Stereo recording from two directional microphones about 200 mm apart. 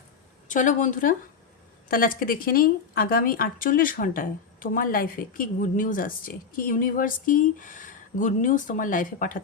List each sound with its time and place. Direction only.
0.4 s a woman's voice: 40° left (ahead or behind)